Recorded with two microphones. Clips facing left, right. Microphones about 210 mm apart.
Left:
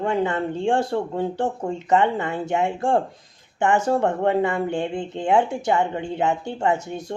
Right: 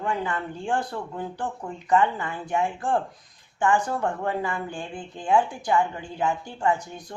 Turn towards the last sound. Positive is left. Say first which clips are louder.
# left 3 dB
turn(degrees=25)  # may be behind; listen again after turning